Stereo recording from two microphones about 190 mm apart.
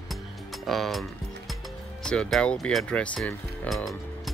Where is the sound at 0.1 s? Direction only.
Centre (ahead or behind).